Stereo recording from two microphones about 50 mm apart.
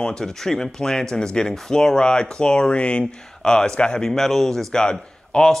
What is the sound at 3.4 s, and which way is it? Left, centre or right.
Speech, centre.